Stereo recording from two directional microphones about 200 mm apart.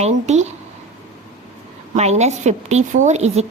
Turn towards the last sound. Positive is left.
turn(degrees=-35)  # may be behind; listen again after turning